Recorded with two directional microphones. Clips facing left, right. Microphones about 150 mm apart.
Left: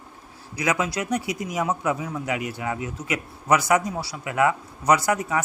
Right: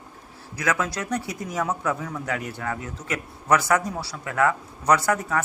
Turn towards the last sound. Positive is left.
turn(degrees=10)  # may be behind; listen again after turning